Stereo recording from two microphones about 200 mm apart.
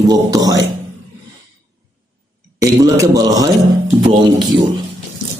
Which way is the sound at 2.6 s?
15° right (ahead or behind).